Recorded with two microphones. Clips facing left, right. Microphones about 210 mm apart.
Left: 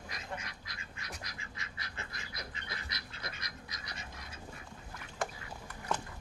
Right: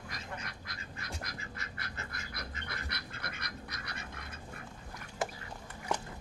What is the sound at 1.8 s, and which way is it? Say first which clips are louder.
Duck: right 2 dB; 50° right (ahead or behind).